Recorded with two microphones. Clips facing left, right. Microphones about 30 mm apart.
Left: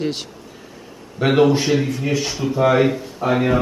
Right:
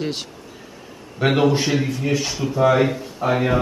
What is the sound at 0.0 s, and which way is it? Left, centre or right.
Speech, centre.